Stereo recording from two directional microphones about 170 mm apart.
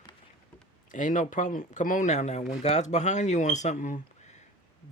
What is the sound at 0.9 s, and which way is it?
Speech, 50° left (ahead or behind).